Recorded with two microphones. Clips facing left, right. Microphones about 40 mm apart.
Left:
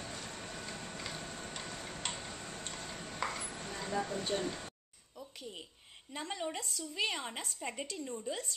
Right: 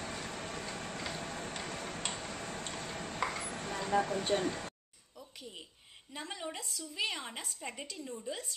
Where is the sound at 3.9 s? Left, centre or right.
Right.